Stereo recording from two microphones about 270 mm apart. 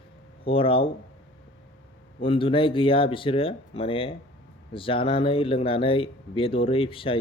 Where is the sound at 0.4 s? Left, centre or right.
Centre.